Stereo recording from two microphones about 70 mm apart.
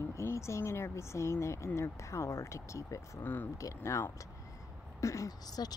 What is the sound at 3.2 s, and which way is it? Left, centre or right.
Speech, left.